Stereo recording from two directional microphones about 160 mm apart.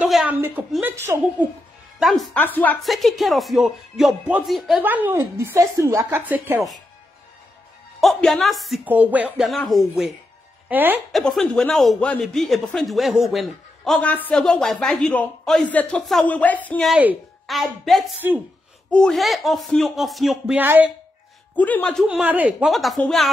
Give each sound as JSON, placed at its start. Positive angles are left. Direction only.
{"t": 0.0, "sound": "a woman's voice", "side_deg": -5}
{"t": 2.0, "sound": "speech", "side_deg": 0}
{"t": 2.4, "sound": "a man's voice", "side_deg": 10}
{"t": 2.8, "sound": "speech", "side_deg": 0}
{"t": 4.8, "sound": "a woman's voice", "side_deg": -10}
{"t": 8.0, "sound": "speech", "side_deg": 0}
{"t": 10.7, "sound": "speech", "side_deg": -10}
{"t": 11.1, "sound": "speech", "side_deg": 0}
{"t": 16.9, "sound": "a woman's voice", "side_deg": -10}
{"t": 21.5, "sound": "a man's voice", "side_deg": 10}
{"t": 22.0, "sound": "speech", "side_deg": -10}